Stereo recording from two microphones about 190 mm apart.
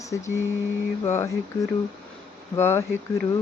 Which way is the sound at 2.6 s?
10° left (ahead or behind).